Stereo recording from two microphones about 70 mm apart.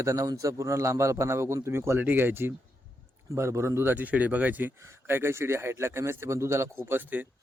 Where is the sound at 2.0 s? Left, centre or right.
Right.